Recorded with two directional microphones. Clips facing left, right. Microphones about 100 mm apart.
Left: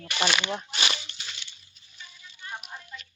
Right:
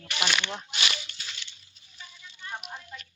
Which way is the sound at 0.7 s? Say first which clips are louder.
Left 2 dB; 30° left (ahead or behind).